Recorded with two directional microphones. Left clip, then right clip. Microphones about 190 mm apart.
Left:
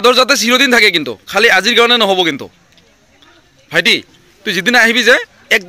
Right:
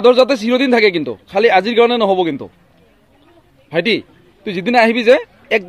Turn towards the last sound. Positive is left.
turn(degrees=0)  # may be behind; listen again after turning